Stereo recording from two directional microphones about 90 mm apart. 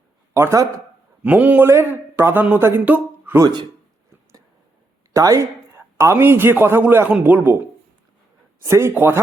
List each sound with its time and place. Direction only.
0.3 s speech: 35° right (ahead or behind)
1.2 s a man's voice: 15° right (ahead or behind)
1.6 s speech: 25° right (ahead or behind)
3.4 s speech: 55° right (ahead or behind)
5.1 s a man's voice: 40° right (ahead or behind); by 7.6 s 20° right (ahead or behind)
8.6 s a man's voice: 30° right (ahead or behind)